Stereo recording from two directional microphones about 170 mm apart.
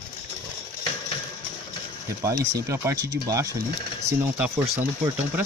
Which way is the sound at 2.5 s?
15° right (ahead or behind).